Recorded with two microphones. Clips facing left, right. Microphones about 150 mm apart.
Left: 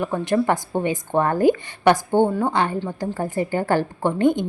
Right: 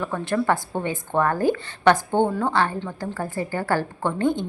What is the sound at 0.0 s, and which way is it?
A woman's voice, 15° left (ahead or behind).